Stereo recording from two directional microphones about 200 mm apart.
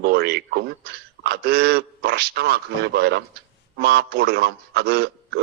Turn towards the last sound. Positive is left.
turn(degrees=-50)  # may be behind; listen again after turning